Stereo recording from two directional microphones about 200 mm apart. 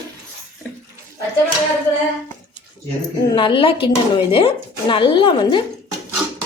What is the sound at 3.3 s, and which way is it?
Speech, 25° left (ahead or behind).